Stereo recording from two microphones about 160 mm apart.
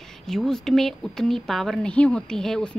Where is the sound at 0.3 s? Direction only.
Centre (ahead or behind).